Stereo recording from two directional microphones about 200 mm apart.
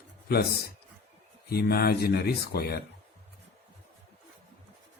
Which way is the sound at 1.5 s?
50° left (ahead or behind).